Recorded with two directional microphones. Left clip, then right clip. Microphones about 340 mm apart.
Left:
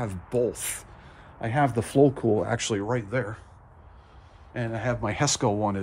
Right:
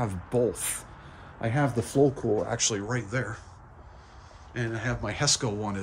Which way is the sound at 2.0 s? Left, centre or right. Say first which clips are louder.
Left 3 dB; left.